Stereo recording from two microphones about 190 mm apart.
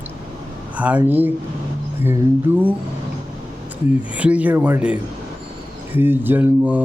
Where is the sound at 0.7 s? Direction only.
10° right (ahead or behind).